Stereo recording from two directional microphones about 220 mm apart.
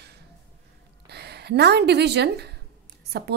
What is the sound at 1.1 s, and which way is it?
A woman's voice, 50° right (ahead or behind).